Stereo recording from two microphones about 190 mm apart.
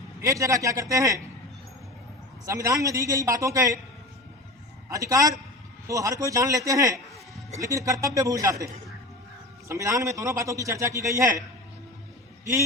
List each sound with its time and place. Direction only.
0.2 s a man's voice: 15° right (ahead or behind)
2.5 s a man's voice: 15° right (ahead or behind)
4.9 s a man's voice: 15° right (ahead or behind)